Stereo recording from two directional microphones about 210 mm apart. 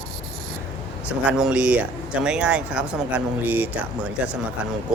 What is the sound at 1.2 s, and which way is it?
Speech, 5° right (ahead or behind).